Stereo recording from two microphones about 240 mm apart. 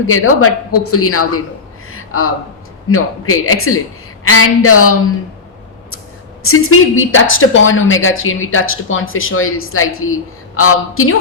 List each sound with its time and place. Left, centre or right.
0.1 s a woman's voice: left
1.9 s a sound: left
2.9 s a woman's voice: left
6.4 s a woman's voice: left